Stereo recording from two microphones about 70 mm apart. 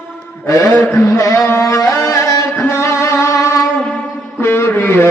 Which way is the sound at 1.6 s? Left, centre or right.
Left.